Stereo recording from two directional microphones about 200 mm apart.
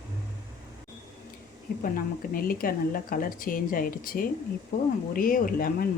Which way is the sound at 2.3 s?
45° left (ahead or behind).